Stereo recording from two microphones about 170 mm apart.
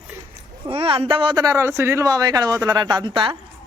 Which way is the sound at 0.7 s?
35° right (ahead or behind).